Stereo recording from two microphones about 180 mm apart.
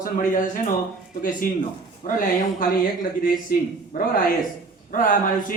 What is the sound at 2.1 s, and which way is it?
Speech, 50° left (ahead or behind).